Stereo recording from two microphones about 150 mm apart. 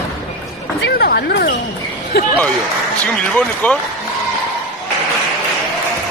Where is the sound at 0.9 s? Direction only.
90° left.